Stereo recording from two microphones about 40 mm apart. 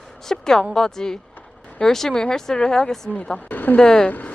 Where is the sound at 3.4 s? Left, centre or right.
Left.